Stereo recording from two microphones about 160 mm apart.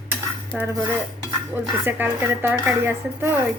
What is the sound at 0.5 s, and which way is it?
A woman's voice, 5° right (ahead or behind).